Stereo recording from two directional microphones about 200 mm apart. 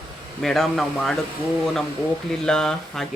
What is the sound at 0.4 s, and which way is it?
Speech, centre (ahead or behind).